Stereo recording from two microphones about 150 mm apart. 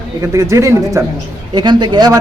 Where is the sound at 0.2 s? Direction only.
20° right (ahead or behind).